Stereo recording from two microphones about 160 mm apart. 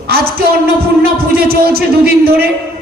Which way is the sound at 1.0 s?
80° right.